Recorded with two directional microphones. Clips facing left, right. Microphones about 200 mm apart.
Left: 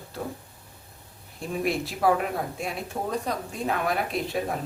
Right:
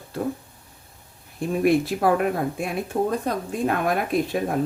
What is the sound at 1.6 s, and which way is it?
Speech, 55° right (ahead or behind).